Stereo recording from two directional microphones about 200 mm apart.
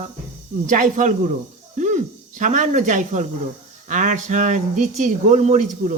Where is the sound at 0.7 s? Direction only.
40° right (ahead or behind).